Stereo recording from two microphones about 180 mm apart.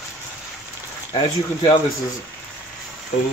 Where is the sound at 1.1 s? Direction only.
30° left (ahead or behind).